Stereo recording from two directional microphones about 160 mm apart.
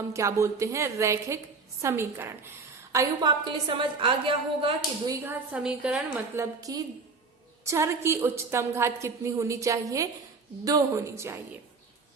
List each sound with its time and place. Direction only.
0.1 s a woman's voice: 20° right (ahead or behind)
5.2 s a woman's voice: 10° right (ahead or behind)
6.4 s a woman's voice: 20° right (ahead or behind)